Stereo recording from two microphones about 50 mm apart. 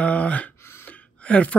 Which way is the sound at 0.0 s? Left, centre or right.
Left.